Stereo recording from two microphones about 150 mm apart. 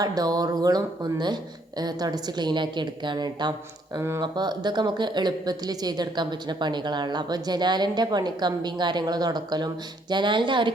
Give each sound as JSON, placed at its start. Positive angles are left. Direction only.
{"t": 0.0, "sound": "speech", "side_deg": -25}
{"t": 3.9, "sound": "speech", "side_deg": -20}
{"t": 4.2, "sound": "speech", "side_deg": -30}